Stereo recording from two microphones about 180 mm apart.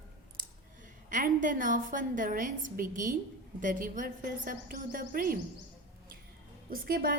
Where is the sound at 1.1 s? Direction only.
45° right (ahead or behind).